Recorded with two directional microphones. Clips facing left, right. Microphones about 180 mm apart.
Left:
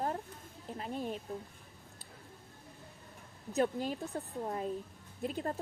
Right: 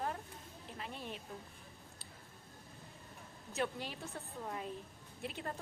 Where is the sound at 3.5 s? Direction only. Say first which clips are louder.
Left 7 dB; 40° left (ahead or behind).